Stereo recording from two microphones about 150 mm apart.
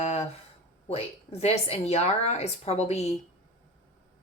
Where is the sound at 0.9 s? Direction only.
40° left (ahead or behind).